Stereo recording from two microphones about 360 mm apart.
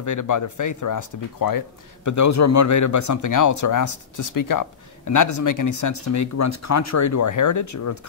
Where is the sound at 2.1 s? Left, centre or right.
Left.